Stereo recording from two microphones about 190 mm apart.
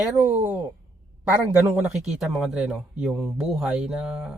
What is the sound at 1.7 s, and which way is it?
Speech, 5° right (ahead or behind).